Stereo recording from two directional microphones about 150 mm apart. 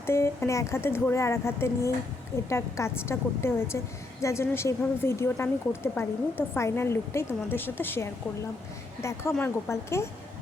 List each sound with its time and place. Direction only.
0.0 s a woman's voice: 15° left (ahead or behind)